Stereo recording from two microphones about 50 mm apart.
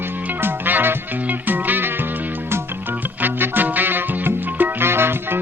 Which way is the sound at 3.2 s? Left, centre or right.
Right.